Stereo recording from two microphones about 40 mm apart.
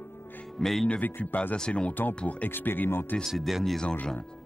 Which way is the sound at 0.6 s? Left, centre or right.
Centre.